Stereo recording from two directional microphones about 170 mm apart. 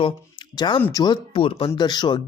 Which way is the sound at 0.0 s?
25° left (ahead or behind).